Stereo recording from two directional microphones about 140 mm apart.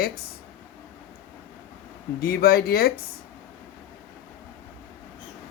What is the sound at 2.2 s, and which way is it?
Speech, 90° left.